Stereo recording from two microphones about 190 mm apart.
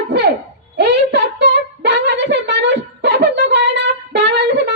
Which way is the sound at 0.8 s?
65° right (ahead or behind).